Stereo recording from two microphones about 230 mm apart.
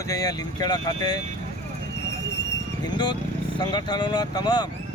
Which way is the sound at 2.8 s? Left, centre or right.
Centre.